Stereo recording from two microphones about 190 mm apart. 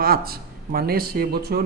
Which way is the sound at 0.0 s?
55° right (ahead or behind).